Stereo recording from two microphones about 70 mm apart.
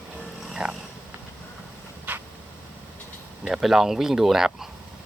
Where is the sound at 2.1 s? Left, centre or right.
Right.